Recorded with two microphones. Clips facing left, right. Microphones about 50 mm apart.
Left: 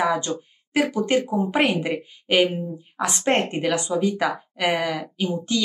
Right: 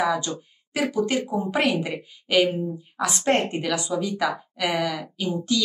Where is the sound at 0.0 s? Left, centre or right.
Left.